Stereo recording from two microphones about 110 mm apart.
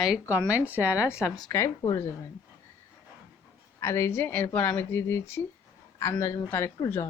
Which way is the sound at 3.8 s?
25° left (ahead or behind).